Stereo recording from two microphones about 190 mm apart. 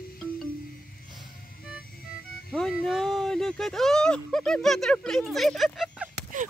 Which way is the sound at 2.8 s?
Centre (ahead or behind).